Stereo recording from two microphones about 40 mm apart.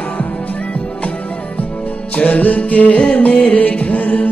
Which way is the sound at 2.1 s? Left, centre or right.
Left.